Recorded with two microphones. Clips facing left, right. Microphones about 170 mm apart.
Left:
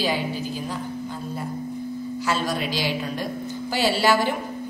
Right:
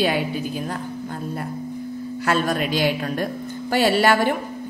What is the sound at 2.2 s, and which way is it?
A man's voice, 55° right (ahead or behind).